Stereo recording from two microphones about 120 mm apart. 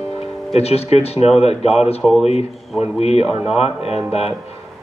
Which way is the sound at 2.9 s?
60° left (ahead or behind).